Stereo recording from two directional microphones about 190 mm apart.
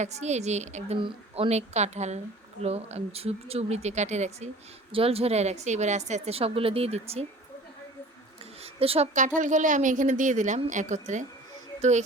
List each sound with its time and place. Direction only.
0.0 s a woman's voice: 35° right (ahead or behind)
8.6 s a woman's voice: 30° right (ahead or behind)